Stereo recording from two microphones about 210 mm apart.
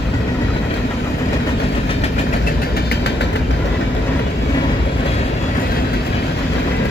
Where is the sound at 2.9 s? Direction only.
55° left (ahead or behind).